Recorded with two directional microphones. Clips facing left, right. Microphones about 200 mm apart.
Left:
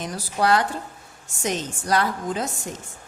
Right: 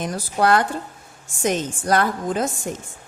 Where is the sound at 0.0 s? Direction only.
50° right (ahead or behind).